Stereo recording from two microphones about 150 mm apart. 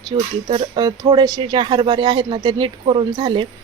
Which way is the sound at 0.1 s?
35° right (ahead or behind).